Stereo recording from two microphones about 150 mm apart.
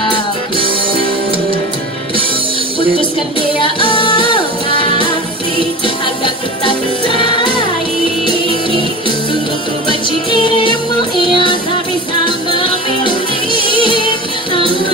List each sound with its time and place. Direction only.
11.1 s music: 30° left (ahead or behind)
13.5 s music: 35° right (ahead or behind)
13.8 s music: 35° left (ahead or behind)